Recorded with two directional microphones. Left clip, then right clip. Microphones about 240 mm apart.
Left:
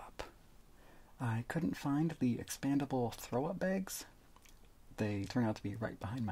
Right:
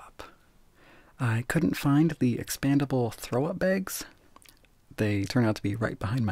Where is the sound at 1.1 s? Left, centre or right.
Right.